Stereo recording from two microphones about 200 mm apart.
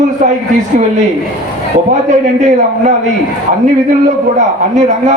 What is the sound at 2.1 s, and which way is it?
Speech, 35° right (ahead or behind).